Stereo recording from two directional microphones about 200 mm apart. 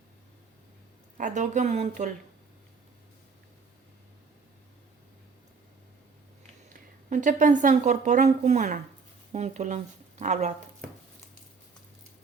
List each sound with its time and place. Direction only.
1.2 s speech: 40° right (ahead or behind)
7.1 s speech: 40° right (ahead or behind)